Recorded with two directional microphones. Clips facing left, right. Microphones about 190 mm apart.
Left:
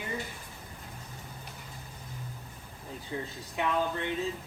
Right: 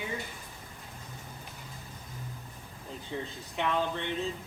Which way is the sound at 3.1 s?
5° left (ahead or behind).